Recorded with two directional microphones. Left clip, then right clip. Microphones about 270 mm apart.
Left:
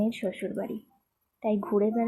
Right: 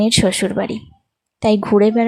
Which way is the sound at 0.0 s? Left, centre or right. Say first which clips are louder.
Right 15 dB; right.